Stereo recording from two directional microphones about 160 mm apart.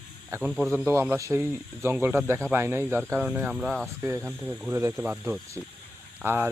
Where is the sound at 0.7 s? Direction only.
15° right (ahead or behind).